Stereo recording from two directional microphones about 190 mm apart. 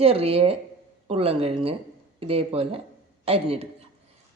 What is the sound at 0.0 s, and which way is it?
A woman's voice, 30° right (ahead or behind).